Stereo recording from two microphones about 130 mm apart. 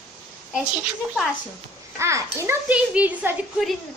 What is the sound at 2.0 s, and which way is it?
Speech, 20° right (ahead or behind).